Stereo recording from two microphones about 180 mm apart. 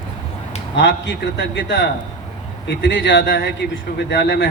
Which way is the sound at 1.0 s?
70° left (ahead or behind).